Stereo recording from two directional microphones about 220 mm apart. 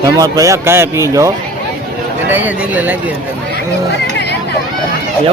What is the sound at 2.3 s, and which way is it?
Speech, 5° right (ahead or behind).